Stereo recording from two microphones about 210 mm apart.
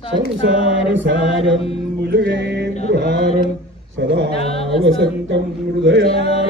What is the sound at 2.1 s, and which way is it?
Music, 60° right (ahead or behind).